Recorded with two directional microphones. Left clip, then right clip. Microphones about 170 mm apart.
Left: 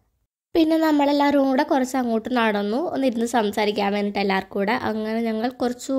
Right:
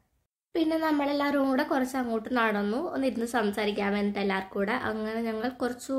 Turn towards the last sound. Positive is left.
turn(degrees=45)  # may be behind; listen again after turning